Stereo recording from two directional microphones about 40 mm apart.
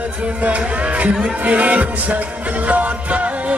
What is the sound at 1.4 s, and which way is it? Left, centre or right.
Music, right.